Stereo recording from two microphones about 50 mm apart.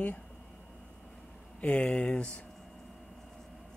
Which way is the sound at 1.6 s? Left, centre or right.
Left.